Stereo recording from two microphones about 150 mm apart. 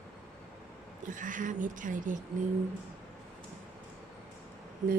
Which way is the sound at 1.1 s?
60° right (ahead or behind).